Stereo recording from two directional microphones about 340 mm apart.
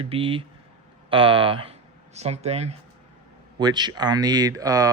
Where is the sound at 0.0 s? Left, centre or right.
Centre.